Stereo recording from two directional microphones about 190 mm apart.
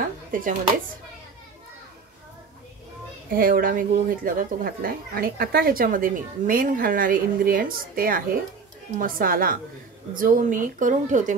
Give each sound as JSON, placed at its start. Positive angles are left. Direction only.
{"t": 0.3, "sound": "speech", "side_deg": -45}
{"t": 3.3, "sound": "speech", "side_deg": -50}